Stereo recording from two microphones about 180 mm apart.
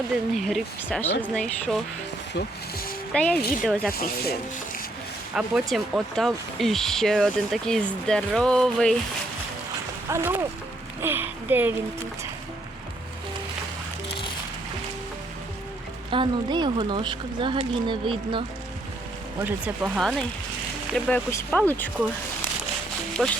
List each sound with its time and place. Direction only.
0.3 s speech: centre (ahead or behind)
3.1 s speech: 5° left (ahead or behind)
3.9 s speech: 60° left (ahead or behind)
5.3 s speech: 5° right (ahead or behind)
10.1 s speech: 15° right (ahead or behind)
16.0 s speech: 30° right (ahead or behind)
19.5 s speech: 10° right (ahead or behind)
21.2 s speech: 10° left (ahead or behind)
23.2 s speech: 5° right (ahead or behind)